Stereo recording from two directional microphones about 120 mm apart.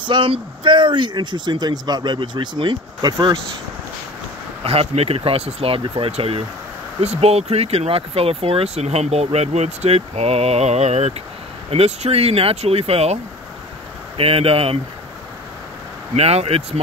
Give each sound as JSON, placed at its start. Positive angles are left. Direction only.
{"t": 0.0, "sound": "speech", "side_deg": -45}
{"t": 4.6, "sound": "speech", "side_deg": -55}
{"t": 16.2, "sound": "speech", "side_deg": -60}